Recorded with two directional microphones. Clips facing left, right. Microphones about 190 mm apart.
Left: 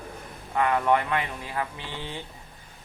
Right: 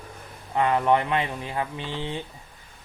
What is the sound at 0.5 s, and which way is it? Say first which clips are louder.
Speech: right 2 dB; 20° right (ahead or behind).